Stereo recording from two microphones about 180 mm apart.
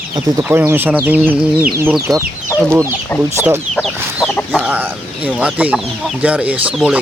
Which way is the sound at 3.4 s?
5° right (ahead or behind).